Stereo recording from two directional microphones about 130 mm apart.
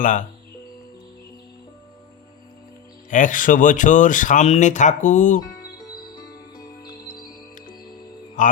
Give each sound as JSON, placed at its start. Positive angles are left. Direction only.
{"t": 0.0, "sound": "speech", "side_deg": 80}
{"t": 3.1, "sound": "speech", "side_deg": 80}
{"t": 6.1, "sound": "music", "side_deg": 30}
{"t": 8.4, "sound": "speech", "side_deg": 80}